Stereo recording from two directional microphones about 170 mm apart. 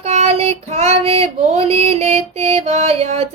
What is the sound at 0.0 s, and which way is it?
Child singing, 40° right (ahead or behind).